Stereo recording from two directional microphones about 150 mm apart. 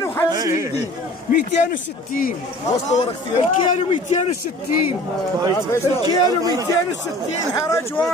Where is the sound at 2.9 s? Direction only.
50° left (ahead or behind).